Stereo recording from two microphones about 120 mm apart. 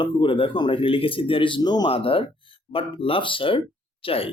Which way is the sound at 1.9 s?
50° left (ahead or behind).